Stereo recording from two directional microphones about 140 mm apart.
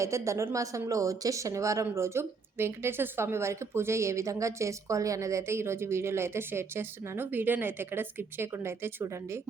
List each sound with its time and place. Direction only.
0.0 s speech: 20° right (ahead or behind)